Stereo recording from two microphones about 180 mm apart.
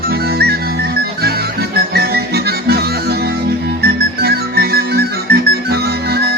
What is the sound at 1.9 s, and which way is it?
Music, 60° right (ahead or behind).